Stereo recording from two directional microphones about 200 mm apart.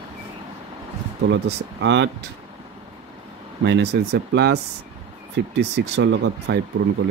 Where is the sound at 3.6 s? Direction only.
60° right (ahead or behind).